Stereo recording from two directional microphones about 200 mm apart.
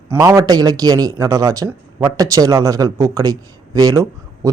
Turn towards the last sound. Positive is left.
turn(degrees=-15)  # may be behind; listen again after turning